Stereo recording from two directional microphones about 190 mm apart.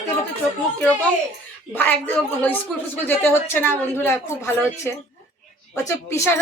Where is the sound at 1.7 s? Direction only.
10° left (ahead or behind).